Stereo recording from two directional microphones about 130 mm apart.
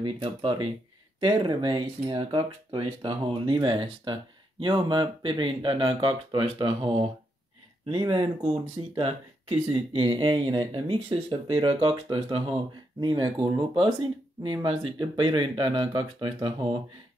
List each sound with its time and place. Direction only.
0.0 s speech: 45° right (ahead or behind)
8.9 s speech: 40° right (ahead or behind)